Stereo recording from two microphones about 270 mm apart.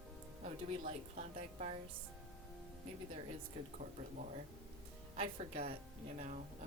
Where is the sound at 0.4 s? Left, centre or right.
Right.